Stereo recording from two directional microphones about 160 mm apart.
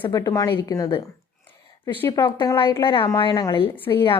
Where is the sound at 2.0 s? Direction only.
15° left (ahead or behind).